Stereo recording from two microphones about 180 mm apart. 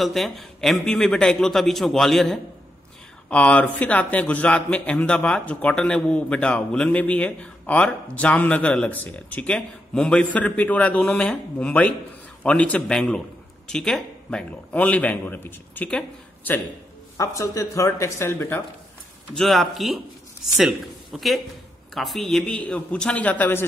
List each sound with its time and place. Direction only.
0.0 s a man's voice: centre (ahead or behind)
17.2 s a man's voice: 15° left (ahead or behind)
19.3 s a man's voice: centre (ahead or behind)